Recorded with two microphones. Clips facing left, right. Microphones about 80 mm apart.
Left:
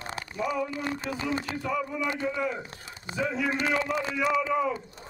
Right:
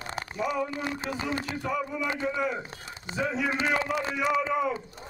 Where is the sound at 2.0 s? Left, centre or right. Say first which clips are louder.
Even; right.